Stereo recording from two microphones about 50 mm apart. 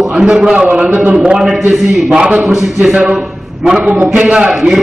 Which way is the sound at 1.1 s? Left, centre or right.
Centre.